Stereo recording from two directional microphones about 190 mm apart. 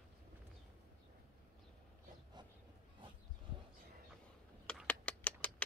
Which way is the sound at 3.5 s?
25° right (ahead or behind).